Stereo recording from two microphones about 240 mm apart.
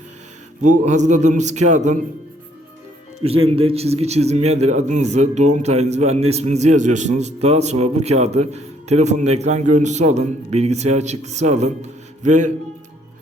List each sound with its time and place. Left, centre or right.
0.6 s a man's voice: right
3.2 s a man's voice: right